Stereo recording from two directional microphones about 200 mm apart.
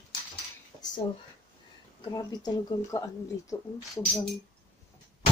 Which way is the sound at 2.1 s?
20° left (ahead or behind).